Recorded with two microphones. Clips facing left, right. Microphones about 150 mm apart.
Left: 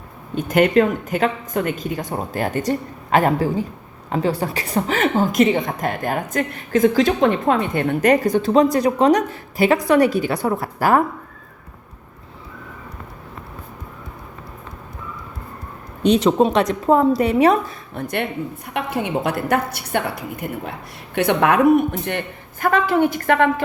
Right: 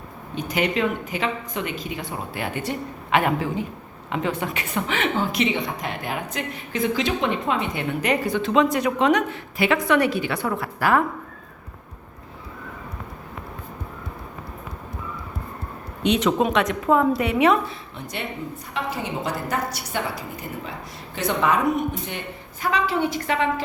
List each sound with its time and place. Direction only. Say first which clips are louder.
0.3 s a woman's voice: left 8 dB; 50° left (ahead or behind)
16.0 s speech: left 5 dB; 35° left (ahead or behind)
17.9 s a woman's voice: left 10 dB; 55° left (ahead or behind)